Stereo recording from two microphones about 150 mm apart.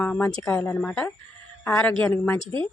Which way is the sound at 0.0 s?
10° left (ahead or behind).